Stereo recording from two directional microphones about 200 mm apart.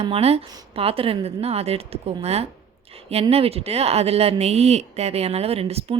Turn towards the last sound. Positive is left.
turn(degrees=-30)  # may be behind; listen again after turning